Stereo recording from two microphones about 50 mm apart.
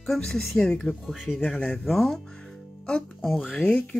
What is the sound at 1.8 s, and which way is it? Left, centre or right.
Speech, centre.